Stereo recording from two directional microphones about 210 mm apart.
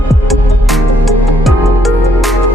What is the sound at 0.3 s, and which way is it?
Music, centre (ahead or behind).